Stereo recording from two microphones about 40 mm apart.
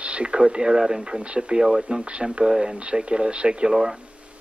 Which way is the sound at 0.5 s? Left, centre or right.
Centre.